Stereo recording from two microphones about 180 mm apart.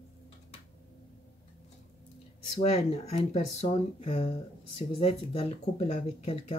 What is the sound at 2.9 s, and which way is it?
Speech, 35° left (ahead or behind).